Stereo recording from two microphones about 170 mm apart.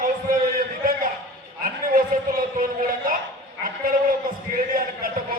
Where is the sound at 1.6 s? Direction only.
55° right (ahead or behind).